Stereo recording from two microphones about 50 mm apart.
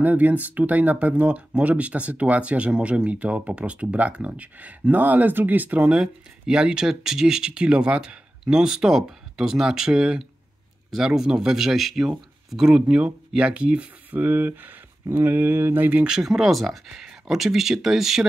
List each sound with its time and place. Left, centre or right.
0.0 s speech: right
5.9 s speech: centre
14.1 s speech: right
16.1 s speech: centre